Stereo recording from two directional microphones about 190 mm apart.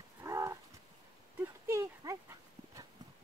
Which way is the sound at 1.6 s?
15° right (ahead or behind).